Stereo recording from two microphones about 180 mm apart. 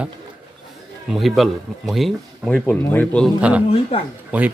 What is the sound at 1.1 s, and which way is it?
Speech, centre (ahead or behind).